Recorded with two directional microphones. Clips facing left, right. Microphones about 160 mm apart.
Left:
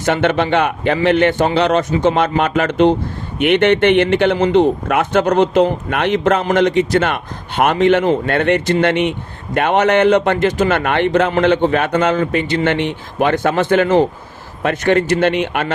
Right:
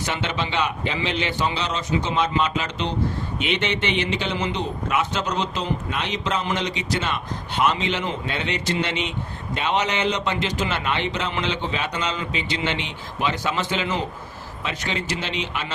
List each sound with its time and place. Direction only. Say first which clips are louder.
0.0 s a man's voice: left 11 dB; 55° left (ahead or behind)